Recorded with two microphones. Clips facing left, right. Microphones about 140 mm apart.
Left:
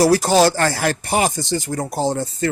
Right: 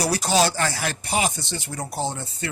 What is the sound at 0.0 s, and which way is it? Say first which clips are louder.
Speech: left 8 dB; 50° left (ahead or behind).